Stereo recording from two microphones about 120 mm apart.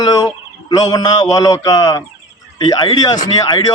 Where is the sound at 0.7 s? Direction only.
35° left (ahead or behind).